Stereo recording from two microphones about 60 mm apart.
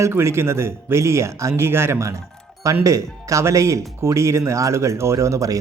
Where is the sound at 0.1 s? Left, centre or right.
Right.